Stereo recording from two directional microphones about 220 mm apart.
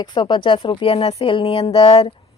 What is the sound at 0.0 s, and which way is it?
Speech, 20° left (ahead or behind).